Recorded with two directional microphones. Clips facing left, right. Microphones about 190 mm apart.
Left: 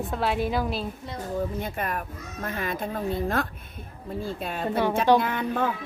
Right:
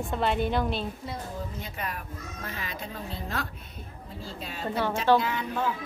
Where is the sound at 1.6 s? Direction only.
50° left (ahead or behind).